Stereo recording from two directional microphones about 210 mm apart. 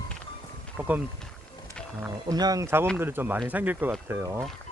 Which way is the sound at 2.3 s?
20° right (ahead or behind).